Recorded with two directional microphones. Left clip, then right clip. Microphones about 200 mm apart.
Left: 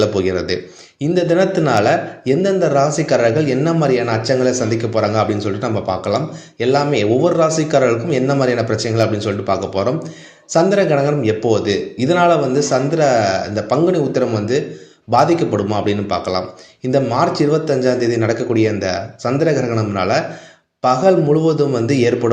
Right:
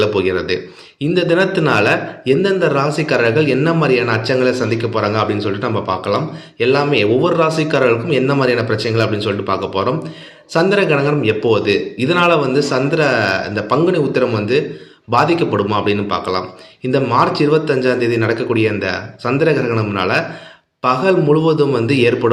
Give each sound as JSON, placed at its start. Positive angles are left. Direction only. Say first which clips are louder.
{"t": 0.0, "sound": "a man's voice", "louder": "right 1 dB", "side_deg": 25}